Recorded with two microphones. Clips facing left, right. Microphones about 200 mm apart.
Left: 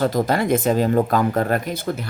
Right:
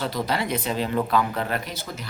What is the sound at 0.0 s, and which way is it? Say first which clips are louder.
Speech: left 7 dB; 50° left (ahead or behind).